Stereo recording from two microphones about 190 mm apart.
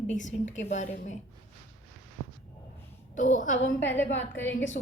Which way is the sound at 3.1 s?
40° left (ahead or behind).